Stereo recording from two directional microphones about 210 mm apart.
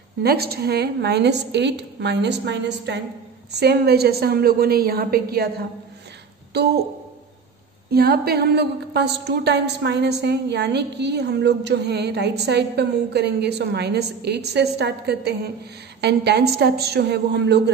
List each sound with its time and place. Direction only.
0.2 s a woman's voice: 50° right (ahead or behind)
6.5 s a woman's voice: 50° right (ahead or behind)
7.9 s a woman's voice: 50° right (ahead or behind)